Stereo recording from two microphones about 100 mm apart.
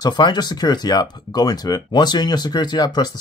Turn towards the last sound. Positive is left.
turn(degrees=45)  # may be behind; listen again after turning